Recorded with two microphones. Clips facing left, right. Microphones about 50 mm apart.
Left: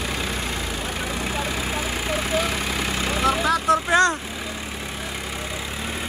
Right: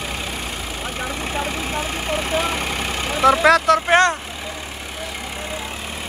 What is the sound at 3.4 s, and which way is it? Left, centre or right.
Speech, right.